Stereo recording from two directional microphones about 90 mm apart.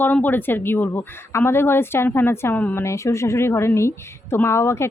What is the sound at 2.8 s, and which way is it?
A woman's voice, 35° left (ahead or behind).